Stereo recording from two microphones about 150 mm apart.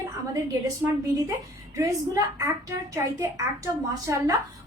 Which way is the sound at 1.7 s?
20° right (ahead or behind).